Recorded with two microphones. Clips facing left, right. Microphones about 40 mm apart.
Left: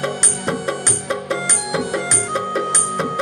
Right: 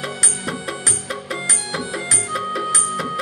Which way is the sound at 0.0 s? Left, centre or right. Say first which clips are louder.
Left 4 dB; centre.